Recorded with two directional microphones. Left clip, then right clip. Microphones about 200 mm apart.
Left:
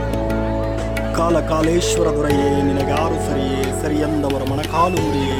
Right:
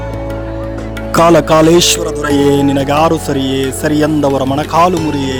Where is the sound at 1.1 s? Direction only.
50° right (ahead or behind).